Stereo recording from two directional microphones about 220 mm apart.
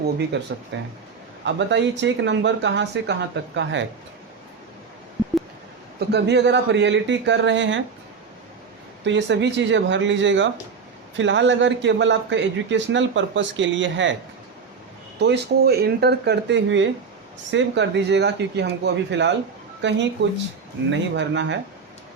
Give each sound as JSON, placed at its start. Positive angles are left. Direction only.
{"t": 0.3, "sound": "a man's voice", "side_deg": -55}
{"t": 6.1, "sound": "speech", "side_deg": -50}
{"t": 9.0, "sound": "a man's voice", "side_deg": -55}
{"t": 15.2, "sound": "a man's voice", "side_deg": -50}